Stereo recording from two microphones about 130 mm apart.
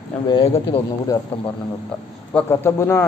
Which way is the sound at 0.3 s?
40° left (ahead or behind).